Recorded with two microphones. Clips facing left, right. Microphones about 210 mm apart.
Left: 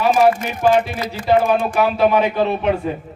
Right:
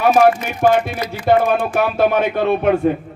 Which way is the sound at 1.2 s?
55° right (ahead or behind).